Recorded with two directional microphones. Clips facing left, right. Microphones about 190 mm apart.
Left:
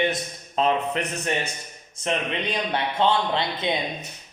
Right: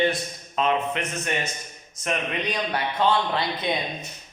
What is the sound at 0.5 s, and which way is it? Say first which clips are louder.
Speech: left 1 dB; 35° left (ahead or behind).